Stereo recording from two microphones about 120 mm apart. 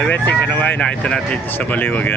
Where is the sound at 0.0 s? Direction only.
10° left (ahead or behind).